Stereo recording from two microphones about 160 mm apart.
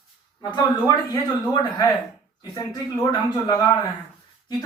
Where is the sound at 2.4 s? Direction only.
25° left (ahead or behind).